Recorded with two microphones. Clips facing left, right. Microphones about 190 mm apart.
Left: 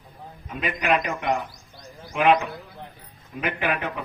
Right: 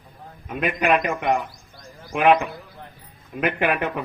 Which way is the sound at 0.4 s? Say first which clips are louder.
Right 4 dB; 55° right (ahead or behind).